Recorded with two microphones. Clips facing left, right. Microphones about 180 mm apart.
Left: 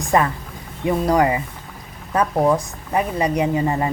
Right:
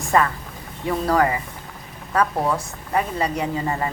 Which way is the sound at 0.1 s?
20° left (ahead or behind).